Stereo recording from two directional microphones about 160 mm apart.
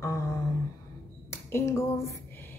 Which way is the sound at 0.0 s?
20° left (ahead or behind).